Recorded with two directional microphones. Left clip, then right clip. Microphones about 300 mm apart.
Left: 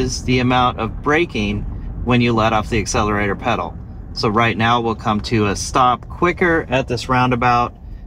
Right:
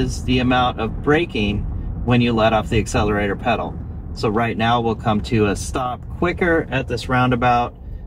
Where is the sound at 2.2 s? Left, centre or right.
Left.